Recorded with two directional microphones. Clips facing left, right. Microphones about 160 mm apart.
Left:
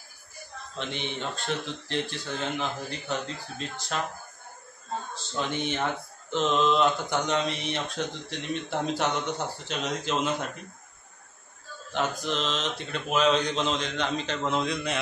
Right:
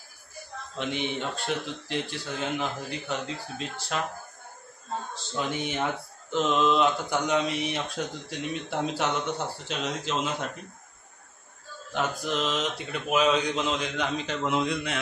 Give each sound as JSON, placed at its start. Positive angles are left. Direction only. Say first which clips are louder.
{"t": 0.7, "sound": "speech", "louder": "right 3 dB", "side_deg": -5}
{"t": 5.5, "sound": "speech", "louder": "left 1 dB", "side_deg": -5}
{"t": 11.9, "sound": "speech", "louder": "even", "side_deg": -5}